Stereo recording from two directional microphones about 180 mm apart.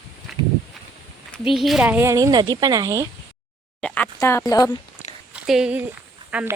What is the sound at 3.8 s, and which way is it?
Speech, 5° left (ahead or behind).